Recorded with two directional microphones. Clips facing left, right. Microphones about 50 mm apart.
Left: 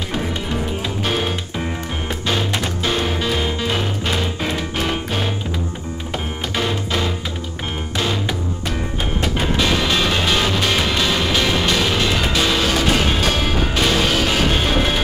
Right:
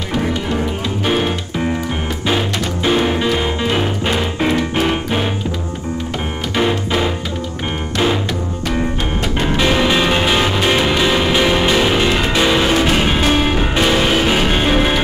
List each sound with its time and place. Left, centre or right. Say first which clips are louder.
1.0 s music: right 5 dB; centre
2.8 s music: right 8 dB; centre
6.5 s music: right 5 dB; centre
9.6 s music: right 5 dB; centre